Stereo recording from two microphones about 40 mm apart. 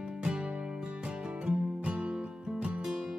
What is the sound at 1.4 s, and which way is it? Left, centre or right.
Music, right.